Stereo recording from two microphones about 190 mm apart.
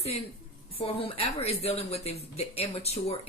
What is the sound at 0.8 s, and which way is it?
Speech, 30° left (ahead or behind).